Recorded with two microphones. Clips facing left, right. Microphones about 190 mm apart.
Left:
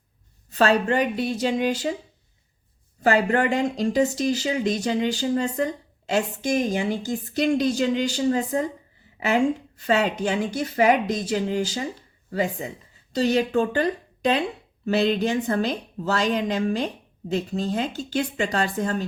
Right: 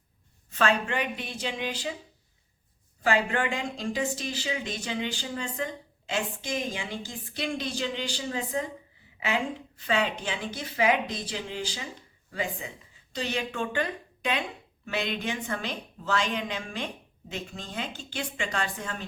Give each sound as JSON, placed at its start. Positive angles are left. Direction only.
{"t": 0.5, "sound": "speech", "side_deg": 35}
{"t": 3.0, "sound": "a woman's voice", "side_deg": 40}